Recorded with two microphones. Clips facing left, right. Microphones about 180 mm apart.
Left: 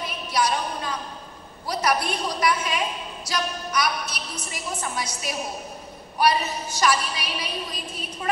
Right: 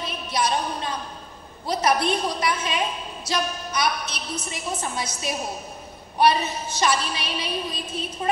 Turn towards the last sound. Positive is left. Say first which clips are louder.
# right 3 dB
turn(degrees=-25)  # may be behind; listen again after turning